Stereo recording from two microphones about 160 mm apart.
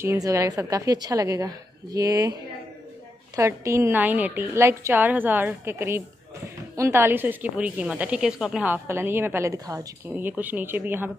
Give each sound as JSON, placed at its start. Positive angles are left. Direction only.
{"t": 0.0, "sound": "a woman's voice", "side_deg": -20}
{"t": 3.3, "sound": "a woman's voice", "side_deg": -15}